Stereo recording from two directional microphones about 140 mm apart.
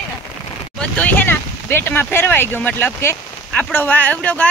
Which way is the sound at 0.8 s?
10° left (ahead or behind).